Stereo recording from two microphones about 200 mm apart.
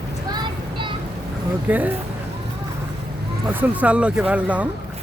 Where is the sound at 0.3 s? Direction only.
20° right (ahead or behind).